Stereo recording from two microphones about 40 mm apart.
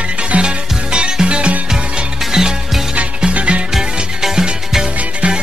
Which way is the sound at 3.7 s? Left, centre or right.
Centre.